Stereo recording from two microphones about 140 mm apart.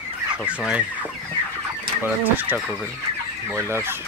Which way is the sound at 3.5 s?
20° right (ahead or behind).